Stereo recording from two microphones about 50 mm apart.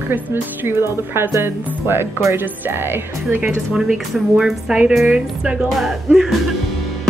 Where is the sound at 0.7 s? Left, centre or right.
Right.